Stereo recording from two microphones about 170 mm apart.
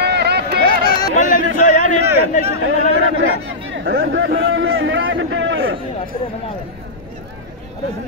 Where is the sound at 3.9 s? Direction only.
80° right.